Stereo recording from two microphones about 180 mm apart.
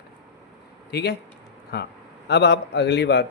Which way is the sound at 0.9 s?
65° left (ahead or behind).